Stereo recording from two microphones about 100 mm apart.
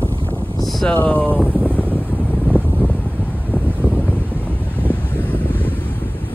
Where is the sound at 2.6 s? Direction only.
20° right (ahead or behind).